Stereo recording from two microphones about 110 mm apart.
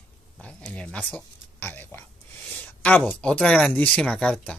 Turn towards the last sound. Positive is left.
turn(degrees=10)  # may be behind; listen again after turning